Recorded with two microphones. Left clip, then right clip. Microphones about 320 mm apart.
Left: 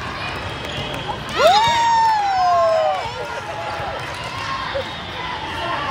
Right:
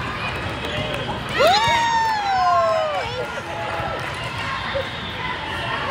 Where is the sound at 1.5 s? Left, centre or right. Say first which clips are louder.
Left 4 dB; left.